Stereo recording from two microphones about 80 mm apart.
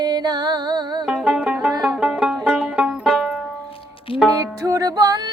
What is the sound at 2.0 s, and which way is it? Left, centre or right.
Music, centre.